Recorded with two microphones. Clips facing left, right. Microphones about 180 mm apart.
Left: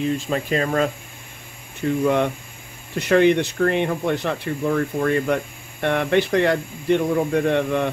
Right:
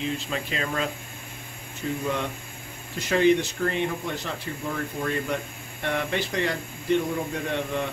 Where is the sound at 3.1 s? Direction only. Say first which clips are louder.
Left 4 dB; 60° left (ahead or behind).